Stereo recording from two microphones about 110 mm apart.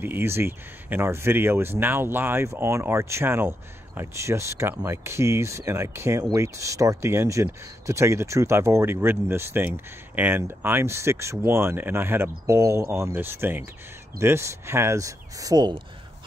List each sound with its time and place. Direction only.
0.0 s speech: 20° right (ahead or behind); by 15.8 s 40° right (ahead or behind)